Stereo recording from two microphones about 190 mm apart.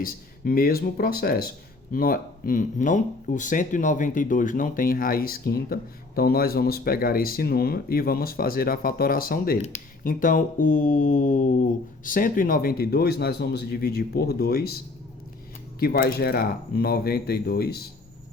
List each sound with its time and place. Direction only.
0.0 s a man's voice: 50° left (ahead or behind)
15.8 s speech: 50° left (ahead or behind)